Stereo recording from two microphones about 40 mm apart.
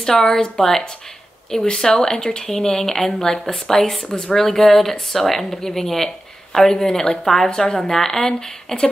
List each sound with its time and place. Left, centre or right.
0.0 s a woman's voice: centre
2.2 s a woman's voice: centre
4.5 s a woman's voice: centre